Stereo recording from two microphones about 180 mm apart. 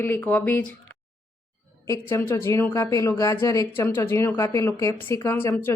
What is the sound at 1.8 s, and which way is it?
Speech, 15° left (ahead or behind).